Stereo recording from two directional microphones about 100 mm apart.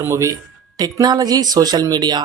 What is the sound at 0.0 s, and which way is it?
Speech, 30° right (ahead or behind).